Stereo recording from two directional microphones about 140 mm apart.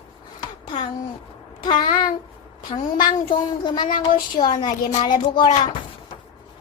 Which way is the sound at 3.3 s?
35° left (ahead or behind).